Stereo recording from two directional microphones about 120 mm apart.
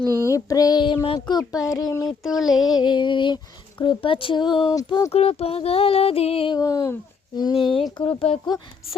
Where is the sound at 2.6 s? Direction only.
35° left (ahead or behind).